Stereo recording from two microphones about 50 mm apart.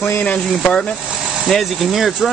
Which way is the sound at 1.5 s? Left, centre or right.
Centre.